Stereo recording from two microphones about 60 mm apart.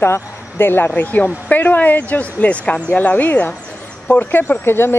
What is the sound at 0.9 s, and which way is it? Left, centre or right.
Speech, left.